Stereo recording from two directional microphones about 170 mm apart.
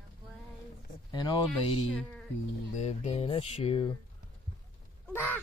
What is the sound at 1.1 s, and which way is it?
Speech, 25° left (ahead or behind).